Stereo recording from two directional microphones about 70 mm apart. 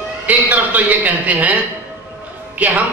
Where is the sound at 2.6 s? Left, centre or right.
Right.